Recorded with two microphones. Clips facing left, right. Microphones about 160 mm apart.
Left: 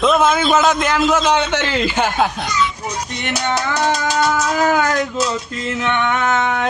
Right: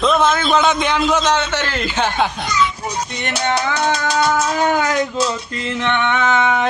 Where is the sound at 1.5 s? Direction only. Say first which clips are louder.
Left 3 dB; 15° left (ahead or behind).